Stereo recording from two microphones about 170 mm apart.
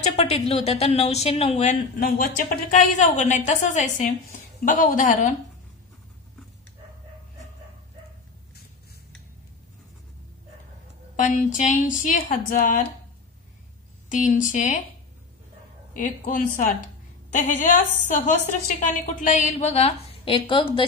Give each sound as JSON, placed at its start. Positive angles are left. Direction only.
{"t": 0.0, "sound": "a woman's voice", "side_deg": 40}
{"t": 2.0, "sound": "a woman's voice", "side_deg": 60}
{"t": 11.1, "sound": "a woman's voice", "side_deg": 50}
{"t": 14.0, "sound": "a woman's voice", "side_deg": 45}
{"t": 15.9, "sound": "a woman's voice", "side_deg": 50}